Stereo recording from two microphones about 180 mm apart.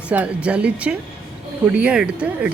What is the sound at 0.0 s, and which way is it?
Speech, 5° right (ahead or behind).